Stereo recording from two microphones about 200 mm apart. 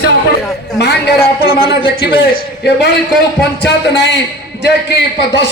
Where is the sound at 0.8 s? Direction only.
55° left (ahead or behind).